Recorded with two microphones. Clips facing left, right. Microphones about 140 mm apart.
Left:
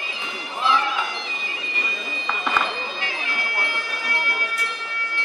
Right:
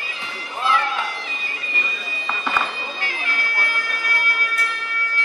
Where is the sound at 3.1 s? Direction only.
20° left (ahead or behind).